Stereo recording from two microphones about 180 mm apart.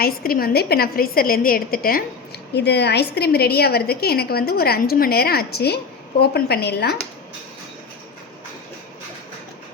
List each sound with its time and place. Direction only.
0.0 s a woman's voice: 55° left (ahead or behind)